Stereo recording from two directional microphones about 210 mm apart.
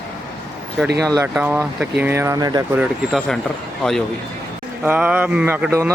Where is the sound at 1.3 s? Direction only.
10° right (ahead or behind).